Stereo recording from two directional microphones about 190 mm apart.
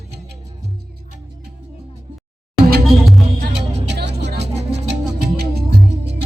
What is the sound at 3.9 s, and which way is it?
Music, 60° right (ahead or behind).